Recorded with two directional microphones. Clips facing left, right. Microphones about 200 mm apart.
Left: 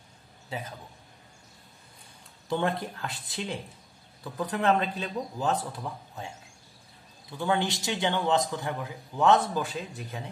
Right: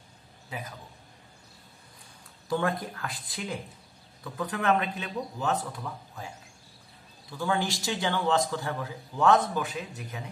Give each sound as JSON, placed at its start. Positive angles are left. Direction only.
{"t": 0.5, "sound": "speech", "side_deg": 30}
{"t": 2.5, "sound": "a man's voice", "side_deg": 25}
{"t": 7.3, "sound": "a man's voice", "side_deg": 20}
{"t": 9.6, "sound": "speech", "side_deg": 30}